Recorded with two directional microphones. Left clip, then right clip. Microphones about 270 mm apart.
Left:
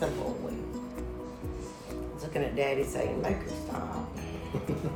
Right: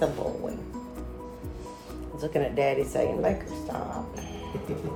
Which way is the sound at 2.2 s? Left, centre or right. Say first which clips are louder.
Right 5 dB; right.